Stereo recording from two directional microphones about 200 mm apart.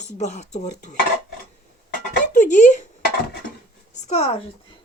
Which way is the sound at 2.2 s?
40° left (ahead or behind).